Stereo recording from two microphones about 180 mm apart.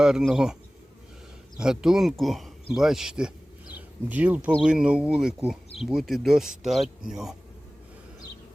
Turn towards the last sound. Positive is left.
turn(degrees=0)  # may be behind; listen again after turning